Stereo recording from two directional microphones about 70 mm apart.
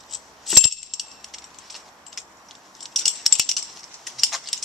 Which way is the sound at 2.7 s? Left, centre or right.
Centre.